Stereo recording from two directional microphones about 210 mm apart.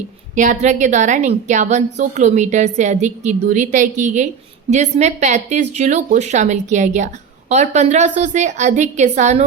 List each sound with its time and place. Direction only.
0.3 s a woman's voice: 35° right (ahead or behind)